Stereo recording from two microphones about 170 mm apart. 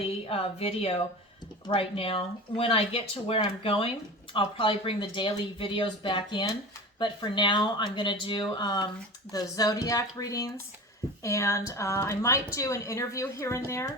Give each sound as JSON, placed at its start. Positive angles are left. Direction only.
{"t": 0.3, "sound": "a woman's voice", "side_deg": 35}